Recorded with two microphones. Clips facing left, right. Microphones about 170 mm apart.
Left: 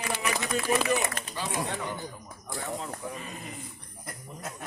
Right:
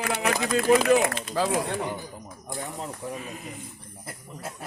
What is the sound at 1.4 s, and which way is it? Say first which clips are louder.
Speech: right 11 dB; 90° right.